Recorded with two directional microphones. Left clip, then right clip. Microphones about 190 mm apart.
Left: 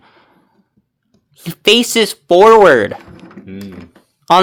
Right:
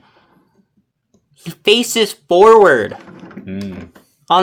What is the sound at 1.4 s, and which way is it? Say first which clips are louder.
Speech: left 2 dB; 30° left (ahead or behind).